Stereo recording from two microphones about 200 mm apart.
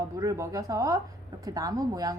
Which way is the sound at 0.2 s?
15° right (ahead or behind).